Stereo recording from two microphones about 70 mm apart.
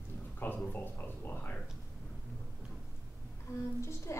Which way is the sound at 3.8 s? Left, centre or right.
Left.